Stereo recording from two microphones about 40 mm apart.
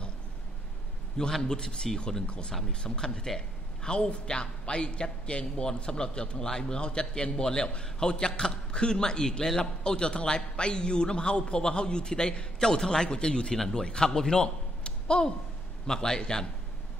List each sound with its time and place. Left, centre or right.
1.4 s a man's voice: left